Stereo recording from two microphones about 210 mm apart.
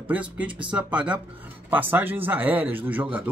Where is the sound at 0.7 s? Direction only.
5° right (ahead or behind).